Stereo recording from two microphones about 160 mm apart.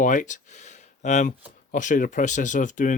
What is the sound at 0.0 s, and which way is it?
Speech, 50° left (ahead or behind).